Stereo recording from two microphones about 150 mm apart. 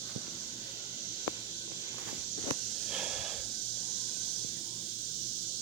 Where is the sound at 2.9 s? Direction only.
5° right (ahead or behind).